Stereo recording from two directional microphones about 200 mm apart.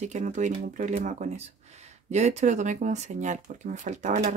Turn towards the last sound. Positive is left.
turn(degrees=-35)  # may be behind; listen again after turning